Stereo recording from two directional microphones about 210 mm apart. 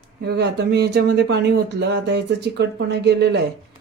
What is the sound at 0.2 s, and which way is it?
Speech, 50° right (ahead or behind).